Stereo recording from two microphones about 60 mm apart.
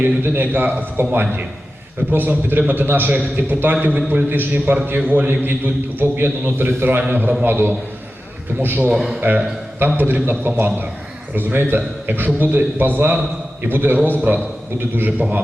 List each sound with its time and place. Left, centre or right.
0.2 s a man's voice: right
3.1 s a man's voice: right
8.9 s a man's voice: centre
9.8 s a man's voice: right